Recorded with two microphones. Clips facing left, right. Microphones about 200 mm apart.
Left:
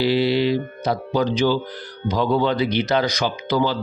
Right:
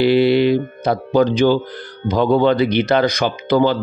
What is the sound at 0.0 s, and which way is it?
Speech, 55° right (ahead or behind).